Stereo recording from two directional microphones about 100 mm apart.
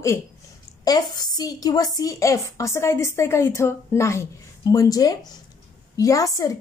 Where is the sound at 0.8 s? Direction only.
40° left (ahead or behind).